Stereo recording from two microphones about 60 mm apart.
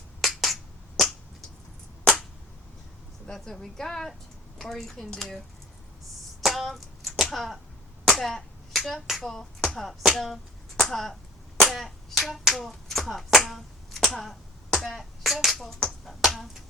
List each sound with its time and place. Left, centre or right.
0.2 s finger snapping: centre
3.2 s a woman's voice: centre
6.4 s hands: centre
8.1 s a sound: centre
11.6 s hands: centre
14.9 s speech: centre